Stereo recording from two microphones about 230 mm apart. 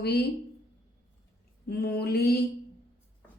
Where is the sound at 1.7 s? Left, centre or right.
Left.